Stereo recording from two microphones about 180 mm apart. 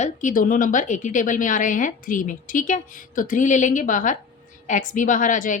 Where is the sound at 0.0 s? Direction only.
45° left (ahead or behind).